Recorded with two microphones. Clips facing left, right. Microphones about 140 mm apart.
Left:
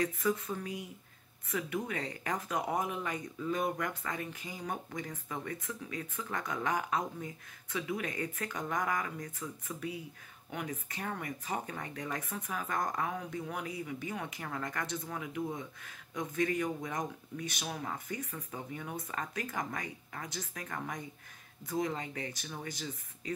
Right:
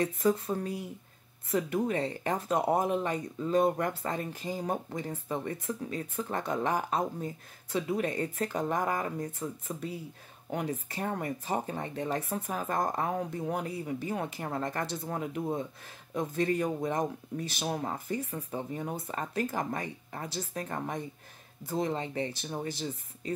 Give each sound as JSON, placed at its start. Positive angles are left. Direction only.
{"t": 0.0, "sound": "speech", "side_deg": -35}